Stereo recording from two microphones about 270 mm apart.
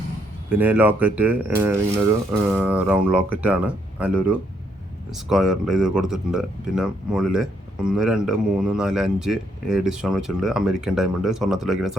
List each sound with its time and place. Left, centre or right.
0.6 s speech: centre